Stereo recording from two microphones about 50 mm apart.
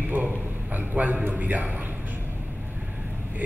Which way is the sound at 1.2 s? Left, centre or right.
Right.